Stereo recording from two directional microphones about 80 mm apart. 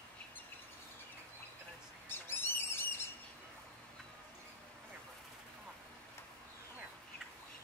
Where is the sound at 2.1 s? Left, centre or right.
Left.